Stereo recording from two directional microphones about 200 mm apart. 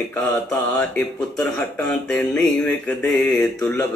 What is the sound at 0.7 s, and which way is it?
Speech, 5° left (ahead or behind).